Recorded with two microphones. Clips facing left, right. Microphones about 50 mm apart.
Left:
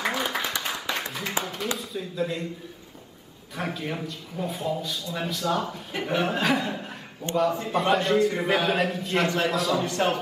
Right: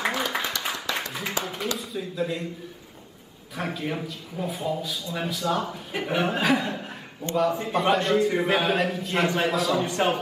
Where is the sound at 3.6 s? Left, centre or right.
Centre.